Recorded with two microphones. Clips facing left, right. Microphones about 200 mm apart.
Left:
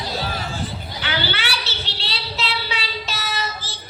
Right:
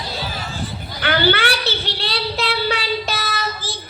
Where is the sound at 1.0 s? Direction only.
55° right (ahead or behind).